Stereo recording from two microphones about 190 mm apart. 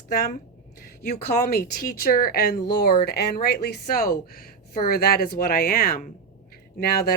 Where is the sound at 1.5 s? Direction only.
50° left (ahead or behind).